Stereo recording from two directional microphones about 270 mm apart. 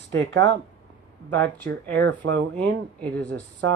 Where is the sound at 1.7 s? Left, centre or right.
Right.